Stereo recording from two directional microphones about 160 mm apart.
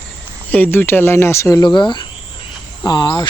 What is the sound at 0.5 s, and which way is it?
Speech, 10° left (ahead or behind).